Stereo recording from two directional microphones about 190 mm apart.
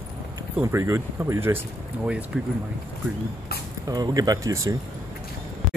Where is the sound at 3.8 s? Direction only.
20° right (ahead or behind).